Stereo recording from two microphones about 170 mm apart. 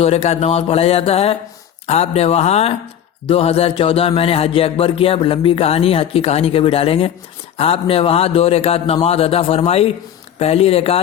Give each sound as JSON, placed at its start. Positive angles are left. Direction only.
{"t": 0.0, "sound": "speech", "side_deg": 35}